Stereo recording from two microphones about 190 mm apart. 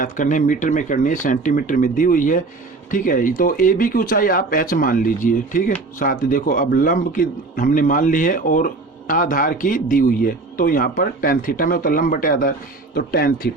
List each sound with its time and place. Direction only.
0.0 s a man's voice: 40° left (ahead or behind)